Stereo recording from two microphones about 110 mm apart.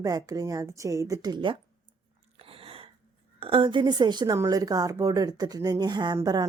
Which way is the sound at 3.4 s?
55° right (ahead or behind).